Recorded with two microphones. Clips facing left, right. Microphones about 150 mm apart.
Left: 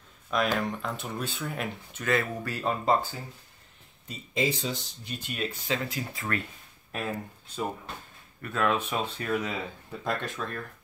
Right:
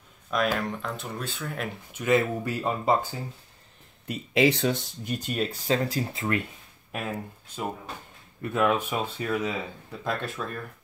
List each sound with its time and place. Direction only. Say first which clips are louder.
0.3 s speech: right 1 dB; centre (ahead or behind)
2.0 s speech: right 5 dB; 20° right (ahead or behind)
4.1 s speech: right 7 dB; 70° right (ahead or behind); by 6.0 s 35° right (ahead or behind)
6.1 s speech: right 3 dB; 20° right (ahead or behind)
6.9 s speech: right 1 dB; 10° right (ahead or behind)